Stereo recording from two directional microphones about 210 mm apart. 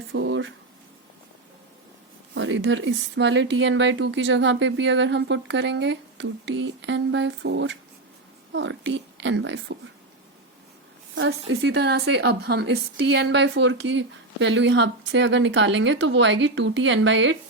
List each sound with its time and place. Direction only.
0.1 s a woman's voice: 60° right (ahead or behind)
2.3 s a woman's voice: 60° right (ahead or behind)
11.1 s a woman's voice: 65° right (ahead or behind)